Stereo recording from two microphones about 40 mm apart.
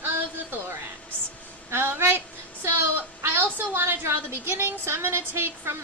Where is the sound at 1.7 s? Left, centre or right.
Right.